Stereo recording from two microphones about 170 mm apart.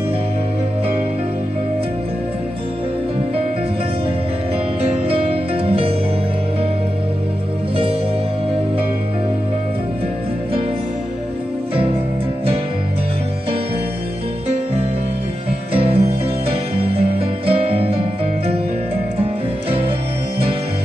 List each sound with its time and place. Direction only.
4.9 s music: 35° right (ahead or behind)
15.7 s music: 35° right (ahead or behind)